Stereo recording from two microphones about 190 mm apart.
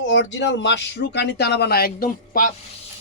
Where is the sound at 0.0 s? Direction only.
75° left (ahead or behind).